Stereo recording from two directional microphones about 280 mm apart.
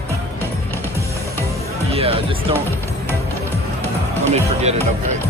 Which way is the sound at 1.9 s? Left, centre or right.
Right.